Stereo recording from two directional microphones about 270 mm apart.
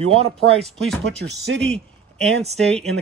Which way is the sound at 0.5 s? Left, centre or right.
Centre.